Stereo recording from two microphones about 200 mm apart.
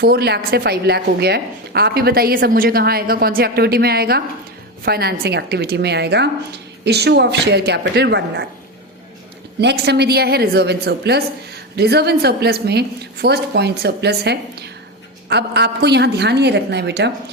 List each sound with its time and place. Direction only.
0.0 s a woman's voice: 50° right (ahead or behind)
9.6 s a woman's voice: 55° right (ahead or behind)